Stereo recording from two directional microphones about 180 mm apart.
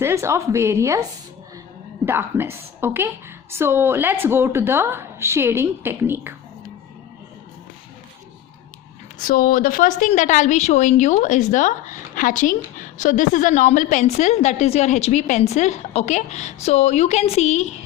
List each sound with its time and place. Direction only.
0.0 s a woman's voice: 15° right (ahead or behind)
2.0 s a woman's voice: 10° right (ahead or behind)
9.1 s a woman's voice: 50° left (ahead or behind)